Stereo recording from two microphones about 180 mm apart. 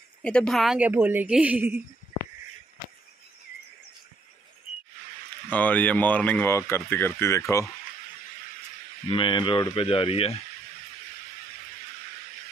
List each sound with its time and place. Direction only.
0.2 s a woman's voice: 5° left (ahead or behind)
5.5 s speech: 10° left (ahead or behind)
9.1 s speech: 25° left (ahead or behind)